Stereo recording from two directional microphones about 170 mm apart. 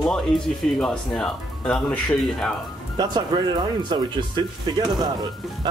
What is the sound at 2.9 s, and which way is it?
Speech, 25° right (ahead or behind).